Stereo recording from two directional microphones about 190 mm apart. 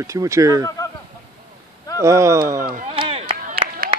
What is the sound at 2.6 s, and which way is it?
Speech, 45° right (ahead or behind).